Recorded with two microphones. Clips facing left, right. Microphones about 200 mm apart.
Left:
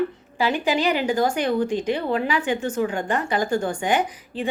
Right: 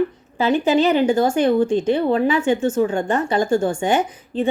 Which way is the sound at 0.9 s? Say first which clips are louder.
Right 5 dB; 25° right (ahead or behind).